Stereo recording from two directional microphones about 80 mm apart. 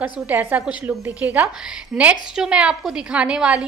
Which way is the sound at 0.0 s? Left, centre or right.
Right.